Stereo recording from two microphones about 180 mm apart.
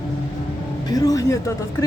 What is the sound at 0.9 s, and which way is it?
Speech, 20° left (ahead or behind).